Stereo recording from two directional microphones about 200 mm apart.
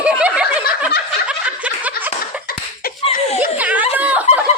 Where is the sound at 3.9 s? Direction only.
10° right (ahead or behind).